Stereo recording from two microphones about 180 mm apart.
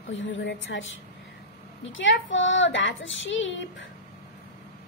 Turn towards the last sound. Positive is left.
turn(degrees=90)